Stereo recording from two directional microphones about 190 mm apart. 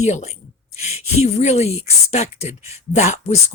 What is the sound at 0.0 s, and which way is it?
Speech, 35° left (ahead or behind).